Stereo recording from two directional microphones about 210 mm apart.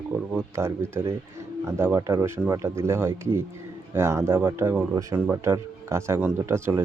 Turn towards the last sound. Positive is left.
turn(degrees=-10)  # may be behind; listen again after turning